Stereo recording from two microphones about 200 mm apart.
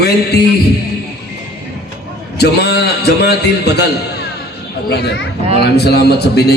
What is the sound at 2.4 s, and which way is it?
A man's voice, 55° left (ahead or behind).